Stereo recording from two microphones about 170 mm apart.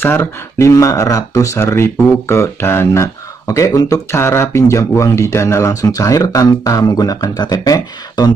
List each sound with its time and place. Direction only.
0.0 s speech: 15° left (ahead or behind)